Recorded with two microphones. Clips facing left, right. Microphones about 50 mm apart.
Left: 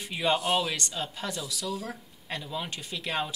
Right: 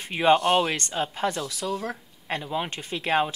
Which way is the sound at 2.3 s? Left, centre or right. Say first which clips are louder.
Right 6 dB; right.